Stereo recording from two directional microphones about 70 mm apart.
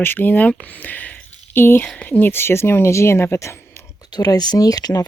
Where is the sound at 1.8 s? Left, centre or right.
Centre.